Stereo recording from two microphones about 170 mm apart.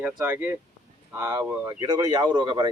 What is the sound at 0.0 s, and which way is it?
Speech, 10° right (ahead or behind).